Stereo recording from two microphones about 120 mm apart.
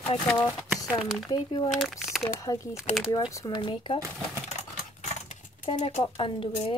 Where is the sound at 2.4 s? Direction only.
25° left (ahead or behind).